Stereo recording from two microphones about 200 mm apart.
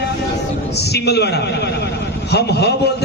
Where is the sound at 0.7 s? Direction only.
55° left (ahead or behind).